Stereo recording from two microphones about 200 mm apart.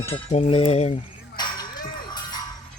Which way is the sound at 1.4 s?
20° left (ahead or behind).